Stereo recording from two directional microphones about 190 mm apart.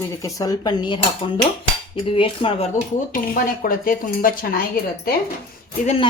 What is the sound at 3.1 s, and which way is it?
Speech, 45° left (ahead or behind).